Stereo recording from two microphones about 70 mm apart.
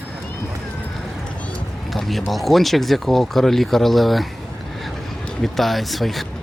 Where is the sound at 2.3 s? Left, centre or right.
Centre.